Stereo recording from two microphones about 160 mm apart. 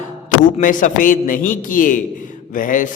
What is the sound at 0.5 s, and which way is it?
A man's voice, 55° left (ahead or behind).